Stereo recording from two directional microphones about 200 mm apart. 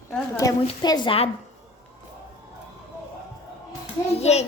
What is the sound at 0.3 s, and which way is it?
Speech, 20° left (ahead or behind).